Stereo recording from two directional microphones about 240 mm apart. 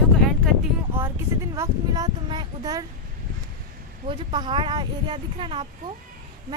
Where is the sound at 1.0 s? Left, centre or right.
Centre.